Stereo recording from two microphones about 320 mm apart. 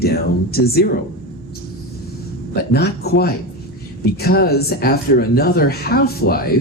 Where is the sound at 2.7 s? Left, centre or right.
Left.